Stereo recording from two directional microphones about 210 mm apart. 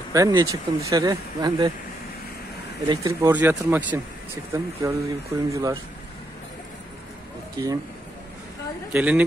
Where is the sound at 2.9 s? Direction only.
15° right (ahead or behind).